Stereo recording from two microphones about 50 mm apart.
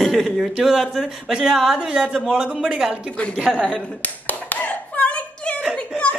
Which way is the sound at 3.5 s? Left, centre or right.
Centre.